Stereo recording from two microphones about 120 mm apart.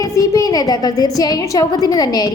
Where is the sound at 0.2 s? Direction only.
30° left (ahead or behind).